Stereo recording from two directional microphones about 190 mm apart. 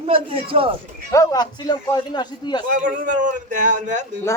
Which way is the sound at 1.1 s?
20° left (ahead or behind).